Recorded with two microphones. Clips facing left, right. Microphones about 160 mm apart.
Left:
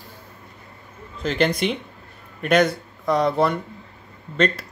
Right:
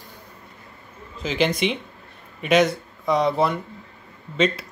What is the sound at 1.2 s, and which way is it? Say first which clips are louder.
Speech: left 1 dB; centre (ahead or behind).